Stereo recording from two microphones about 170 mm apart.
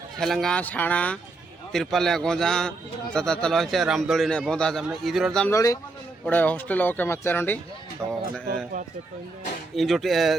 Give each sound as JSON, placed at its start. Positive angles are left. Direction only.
{"t": 0.2, "sound": "a man's voice", "side_deg": 0}
{"t": 5.5, "sound": "a man's voice", "side_deg": 20}
{"t": 6.2, "sound": "speech", "side_deg": 10}
{"t": 9.7, "sound": "a man's voice", "side_deg": 0}